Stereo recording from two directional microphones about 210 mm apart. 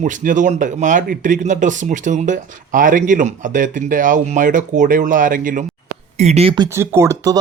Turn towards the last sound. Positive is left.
turn(degrees=-15)  # may be behind; listen again after turning